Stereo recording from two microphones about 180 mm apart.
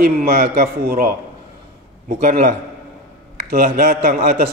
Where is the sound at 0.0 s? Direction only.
55° right (ahead or behind).